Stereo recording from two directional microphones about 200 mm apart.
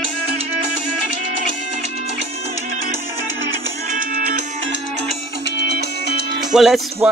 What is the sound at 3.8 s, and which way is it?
Music, 40° right (ahead or behind).